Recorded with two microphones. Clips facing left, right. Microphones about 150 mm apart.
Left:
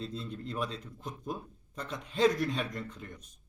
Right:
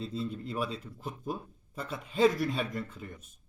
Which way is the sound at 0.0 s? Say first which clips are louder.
Right 3 dB; 5° right (ahead or behind).